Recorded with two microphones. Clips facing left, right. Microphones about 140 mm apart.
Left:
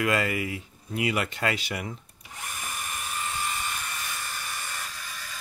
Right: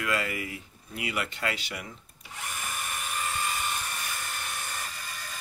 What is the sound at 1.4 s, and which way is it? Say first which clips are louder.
Speech: left 4 dB; 65° left (ahead or behind).